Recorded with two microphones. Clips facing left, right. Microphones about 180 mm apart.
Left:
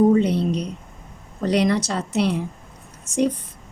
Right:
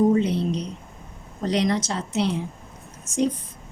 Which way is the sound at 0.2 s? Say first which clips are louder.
Left 3 dB; 60° left (ahead or behind).